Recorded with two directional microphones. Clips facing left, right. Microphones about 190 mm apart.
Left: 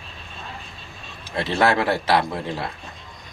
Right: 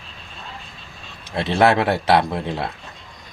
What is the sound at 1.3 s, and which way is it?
Speech, 20° right (ahead or behind).